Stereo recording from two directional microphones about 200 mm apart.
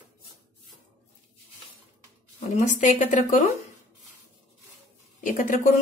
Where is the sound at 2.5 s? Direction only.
40° left (ahead or behind).